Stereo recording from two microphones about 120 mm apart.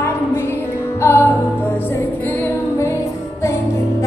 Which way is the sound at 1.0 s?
20° left (ahead or behind).